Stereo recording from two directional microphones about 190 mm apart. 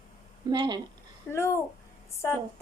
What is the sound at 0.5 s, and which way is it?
Speech, 25° right (ahead or behind).